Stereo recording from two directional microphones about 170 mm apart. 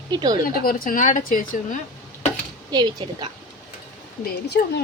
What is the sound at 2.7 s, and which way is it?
Speech, 25° right (ahead or behind).